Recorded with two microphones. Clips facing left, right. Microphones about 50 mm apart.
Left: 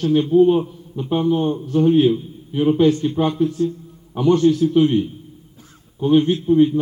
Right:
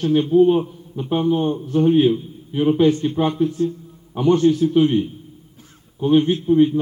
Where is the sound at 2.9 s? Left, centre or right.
Right.